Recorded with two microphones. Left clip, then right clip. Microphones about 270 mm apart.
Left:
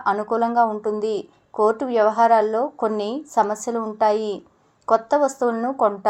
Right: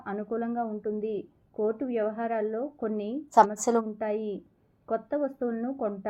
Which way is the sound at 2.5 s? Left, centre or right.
Left.